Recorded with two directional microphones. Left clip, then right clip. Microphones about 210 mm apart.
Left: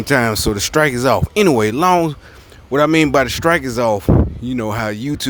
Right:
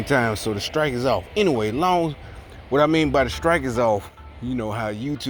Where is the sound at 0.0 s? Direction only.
35° left (ahead or behind).